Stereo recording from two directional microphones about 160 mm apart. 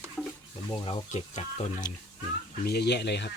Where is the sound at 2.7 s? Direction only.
90° left.